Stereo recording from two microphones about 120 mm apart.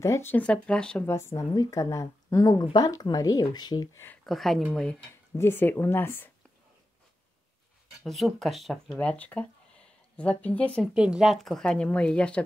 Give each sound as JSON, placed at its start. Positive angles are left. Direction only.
{"t": 0.0, "sound": "a woman's voice", "side_deg": 20}
{"t": 1.0, "sound": "a woman's voice", "side_deg": 20}
{"t": 4.3, "sound": "speech", "side_deg": 0}
{"t": 5.3, "sound": "a woman's voice", "side_deg": 20}
{"t": 8.0, "sound": "speech", "side_deg": 0}
{"t": 8.9, "sound": "speech", "side_deg": 10}
{"t": 10.8, "sound": "a woman's voice", "side_deg": -5}